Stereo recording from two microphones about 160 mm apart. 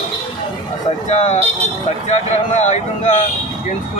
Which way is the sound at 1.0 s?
45° left (ahead or behind).